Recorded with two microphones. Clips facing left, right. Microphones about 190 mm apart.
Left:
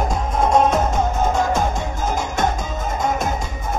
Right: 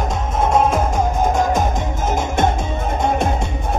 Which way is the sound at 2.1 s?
25° right (ahead or behind).